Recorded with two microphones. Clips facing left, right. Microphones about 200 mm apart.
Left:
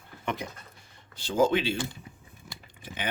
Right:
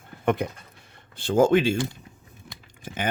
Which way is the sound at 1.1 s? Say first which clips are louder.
Right 5 dB; 55° right (ahead or behind).